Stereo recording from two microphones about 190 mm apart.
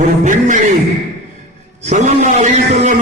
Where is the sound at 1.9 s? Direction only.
40° right (ahead or behind).